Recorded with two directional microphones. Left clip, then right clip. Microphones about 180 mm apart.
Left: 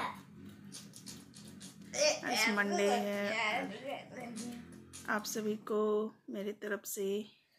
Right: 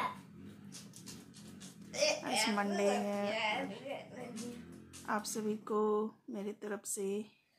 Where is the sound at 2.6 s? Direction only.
10° right (ahead or behind).